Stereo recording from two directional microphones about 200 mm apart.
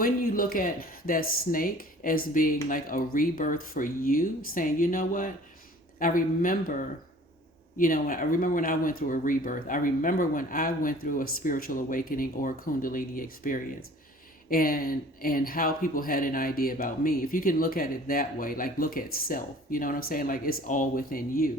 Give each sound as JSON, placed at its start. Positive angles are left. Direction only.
{"t": 0.0, "sound": "speech", "side_deg": 45}